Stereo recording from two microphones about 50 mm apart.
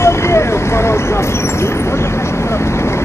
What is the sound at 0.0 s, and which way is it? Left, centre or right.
Vehicle, left.